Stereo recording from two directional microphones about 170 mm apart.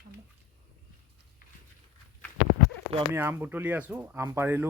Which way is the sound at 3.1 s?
10° right (ahead or behind).